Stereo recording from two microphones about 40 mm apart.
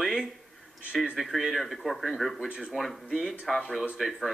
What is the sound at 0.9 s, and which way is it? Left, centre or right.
Speech, centre.